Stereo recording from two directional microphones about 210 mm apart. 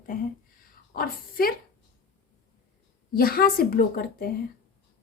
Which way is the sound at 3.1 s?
45° left (ahead or behind).